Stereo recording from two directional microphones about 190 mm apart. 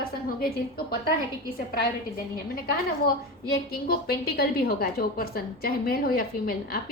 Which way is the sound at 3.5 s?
55° left (ahead or behind).